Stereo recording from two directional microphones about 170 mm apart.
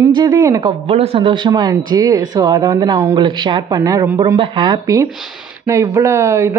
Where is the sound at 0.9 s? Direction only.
35° right (ahead or behind).